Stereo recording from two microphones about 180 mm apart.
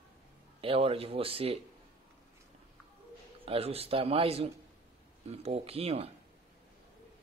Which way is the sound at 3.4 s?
35° right (ahead or behind).